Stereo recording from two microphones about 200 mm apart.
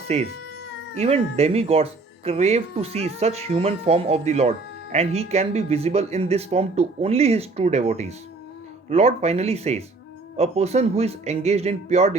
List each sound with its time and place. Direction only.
0.1 s speech: 30° right (ahead or behind)